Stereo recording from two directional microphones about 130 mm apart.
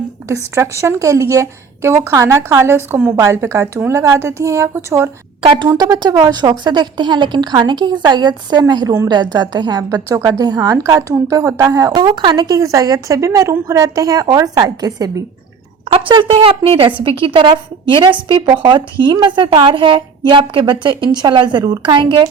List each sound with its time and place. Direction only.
0.3 s a woman's voice: 20° right (ahead or behind)
5.4 s a woman's voice: 40° right (ahead or behind)
15.9 s a woman's voice: 40° right (ahead or behind)